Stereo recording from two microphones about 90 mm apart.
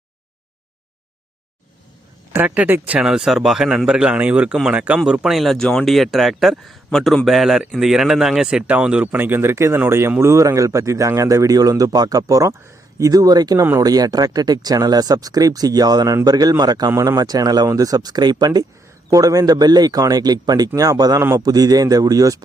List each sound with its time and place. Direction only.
2.3 s speech: 20° right (ahead or behind); by 13.6 s 45° right (ahead or behind)
13.6 s speech: 35° right (ahead or behind); by 16.9 s 50° right (ahead or behind)
16.9 s speech: 35° right (ahead or behind)
17.2 s speech: 45° right (ahead or behind)